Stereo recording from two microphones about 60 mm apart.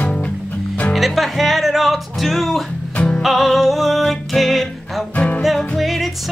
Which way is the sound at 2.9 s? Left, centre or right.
Centre.